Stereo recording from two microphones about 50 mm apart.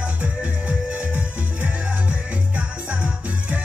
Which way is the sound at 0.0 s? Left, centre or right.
Right.